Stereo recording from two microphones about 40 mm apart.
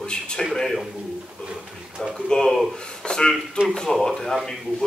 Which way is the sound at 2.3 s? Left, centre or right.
Centre.